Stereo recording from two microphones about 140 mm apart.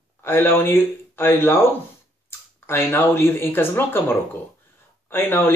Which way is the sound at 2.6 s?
15° left (ahead or behind).